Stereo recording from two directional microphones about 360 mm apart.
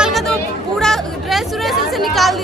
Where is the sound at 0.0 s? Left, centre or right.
Centre.